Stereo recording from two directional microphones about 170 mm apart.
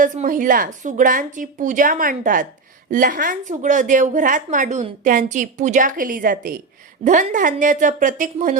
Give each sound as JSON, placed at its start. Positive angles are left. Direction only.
{"t": 0.0, "sound": "a woman's voice", "side_deg": -50}